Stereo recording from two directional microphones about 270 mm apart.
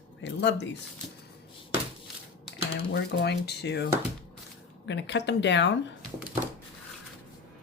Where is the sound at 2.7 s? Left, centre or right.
Left.